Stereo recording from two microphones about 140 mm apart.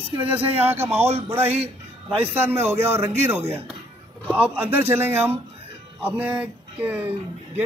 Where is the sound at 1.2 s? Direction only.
15° right (ahead or behind).